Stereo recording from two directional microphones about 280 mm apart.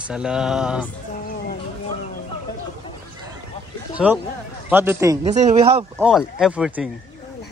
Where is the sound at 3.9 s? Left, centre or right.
Centre.